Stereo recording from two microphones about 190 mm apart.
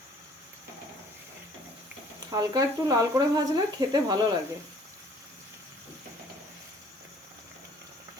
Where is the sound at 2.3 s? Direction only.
20° right (ahead or behind).